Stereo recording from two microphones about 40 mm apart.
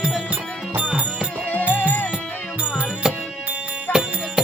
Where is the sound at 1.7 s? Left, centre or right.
Left.